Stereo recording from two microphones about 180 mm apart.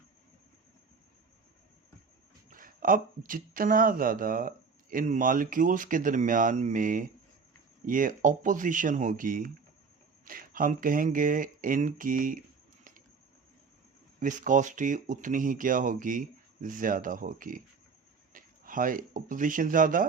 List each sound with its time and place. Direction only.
2.5 s speech: 50° right (ahead or behind)
14.2 s speech: 45° right (ahead or behind)